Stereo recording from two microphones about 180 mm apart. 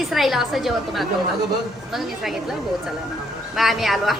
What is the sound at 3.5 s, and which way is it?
Speech, centre (ahead or behind).